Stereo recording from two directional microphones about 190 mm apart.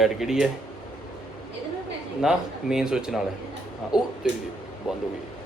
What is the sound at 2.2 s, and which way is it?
Speech, 5° right (ahead or behind).